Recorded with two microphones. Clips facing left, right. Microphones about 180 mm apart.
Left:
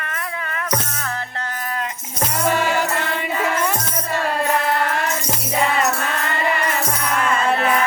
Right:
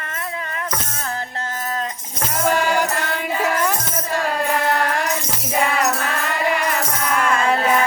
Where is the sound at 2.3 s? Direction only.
Centre (ahead or behind).